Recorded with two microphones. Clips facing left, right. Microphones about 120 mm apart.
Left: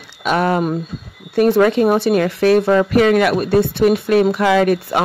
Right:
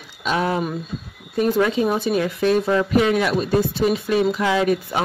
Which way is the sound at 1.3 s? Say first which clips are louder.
Left 6 dB; 70° left (ahead or behind).